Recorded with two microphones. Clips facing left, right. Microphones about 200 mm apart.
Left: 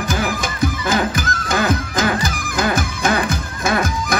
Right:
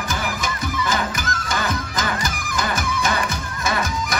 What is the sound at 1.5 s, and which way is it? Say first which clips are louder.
Music: left 7 dB; 50° left (ahead or behind).